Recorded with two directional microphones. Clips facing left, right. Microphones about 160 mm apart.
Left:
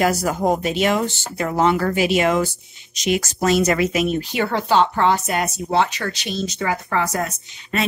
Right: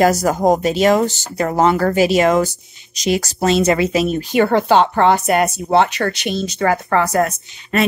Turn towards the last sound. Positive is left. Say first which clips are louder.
# right 5 dB
turn(degrees=-60)  # may be behind; listen again after turning